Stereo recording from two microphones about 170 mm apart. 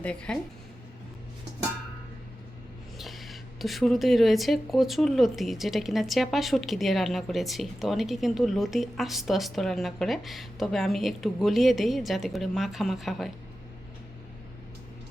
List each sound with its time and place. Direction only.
0.0 s speech: 5° left (ahead or behind)
3.0 s speech: centre (ahead or behind)